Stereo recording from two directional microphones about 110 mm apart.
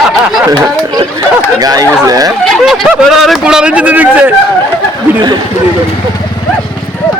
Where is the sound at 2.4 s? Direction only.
Centre (ahead or behind).